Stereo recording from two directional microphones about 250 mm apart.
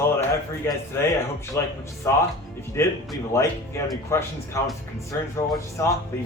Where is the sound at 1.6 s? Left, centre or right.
Centre.